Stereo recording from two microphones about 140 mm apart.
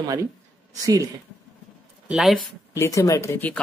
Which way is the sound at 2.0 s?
Centre (ahead or behind).